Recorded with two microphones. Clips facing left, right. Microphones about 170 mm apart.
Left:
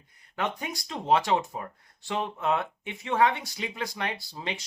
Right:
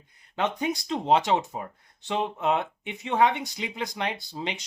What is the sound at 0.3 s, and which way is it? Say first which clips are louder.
Speech: right 5 dB; 20° right (ahead or behind).